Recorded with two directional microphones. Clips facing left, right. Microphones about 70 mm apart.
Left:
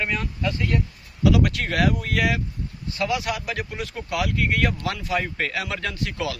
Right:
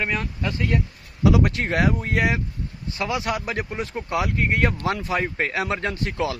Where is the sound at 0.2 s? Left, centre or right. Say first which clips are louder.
Even; right.